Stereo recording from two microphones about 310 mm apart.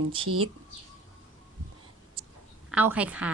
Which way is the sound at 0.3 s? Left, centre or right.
Right.